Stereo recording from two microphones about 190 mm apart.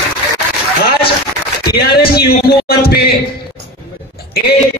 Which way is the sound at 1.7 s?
55° left (ahead or behind).